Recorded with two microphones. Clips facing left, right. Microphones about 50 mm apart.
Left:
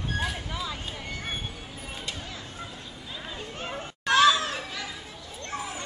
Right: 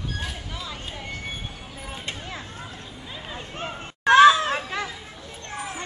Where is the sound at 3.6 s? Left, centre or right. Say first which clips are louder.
Right 8 dB; right.